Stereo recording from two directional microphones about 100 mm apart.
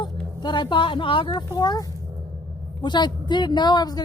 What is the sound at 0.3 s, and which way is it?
Speech, 50° left (ahead or behind).